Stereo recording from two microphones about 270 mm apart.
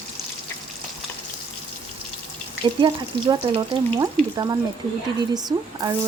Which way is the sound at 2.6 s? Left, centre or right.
Centre.